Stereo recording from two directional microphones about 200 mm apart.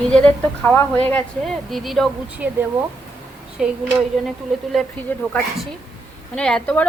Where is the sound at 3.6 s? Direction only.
5° right (ahead or behind).